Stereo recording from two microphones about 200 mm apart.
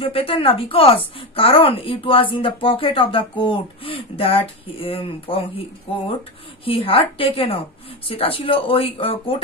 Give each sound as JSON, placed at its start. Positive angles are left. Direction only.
{"t": 0.0, "sound": "a woman's voice", "side_deg": 25}